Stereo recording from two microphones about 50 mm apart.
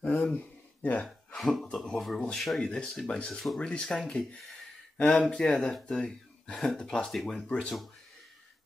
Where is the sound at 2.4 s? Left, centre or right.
Centre.